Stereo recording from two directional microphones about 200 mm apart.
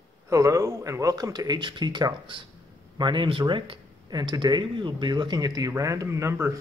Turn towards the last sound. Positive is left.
turn(degrees=-15)  # may be behind; listen again after turning